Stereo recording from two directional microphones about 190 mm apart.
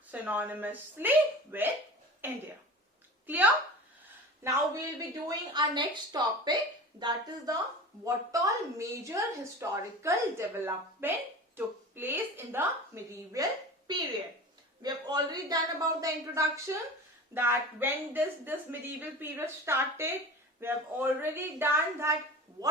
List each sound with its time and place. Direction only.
0.1 s a woman's voice: 10° right (ahead or behind)